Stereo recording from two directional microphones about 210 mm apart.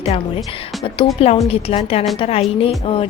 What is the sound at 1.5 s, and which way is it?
A woman's voice, 30° left (ahead or behind).